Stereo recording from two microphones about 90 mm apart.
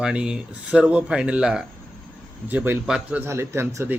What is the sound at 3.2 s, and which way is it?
Speech, 30° right (ahead or behind).